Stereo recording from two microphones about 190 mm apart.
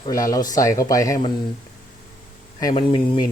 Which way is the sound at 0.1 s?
15° left (ahead or behind).